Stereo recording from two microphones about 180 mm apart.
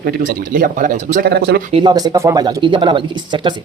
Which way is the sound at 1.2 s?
60° right (ahead or behind).